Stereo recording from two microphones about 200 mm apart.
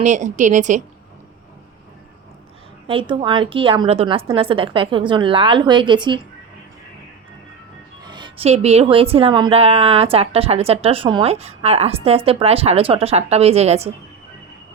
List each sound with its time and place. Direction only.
0.0 s a woman's voice: 35° right (ahead or behind)
2.8 s a woman's voice: 25° right (ahead or behind)
8.0 s a woman's voice: 25° right (ahead or behind)